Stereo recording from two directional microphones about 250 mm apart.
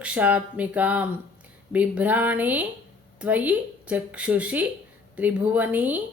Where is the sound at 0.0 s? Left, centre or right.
Centre.